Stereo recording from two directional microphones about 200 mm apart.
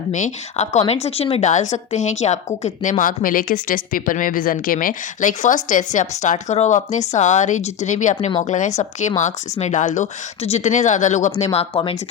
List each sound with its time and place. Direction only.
0.1 s a woman's voice: 35° left (ahead or behind)